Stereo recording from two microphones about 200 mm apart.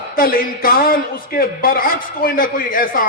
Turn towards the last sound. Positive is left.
turn(degrees=45)  # may be behind; listen again after turning